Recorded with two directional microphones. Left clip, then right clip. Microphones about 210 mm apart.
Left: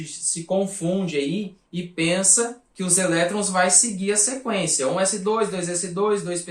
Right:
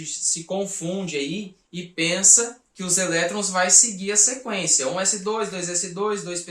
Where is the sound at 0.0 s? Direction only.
20° right (ahead or behind).